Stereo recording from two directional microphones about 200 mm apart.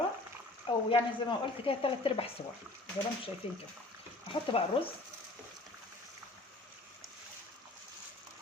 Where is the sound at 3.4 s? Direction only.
25° left (ahead or behind).